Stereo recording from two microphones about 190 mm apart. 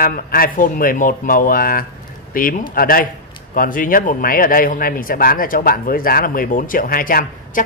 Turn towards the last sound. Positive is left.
turn(degrees=50)  # may be behind; listen again after turning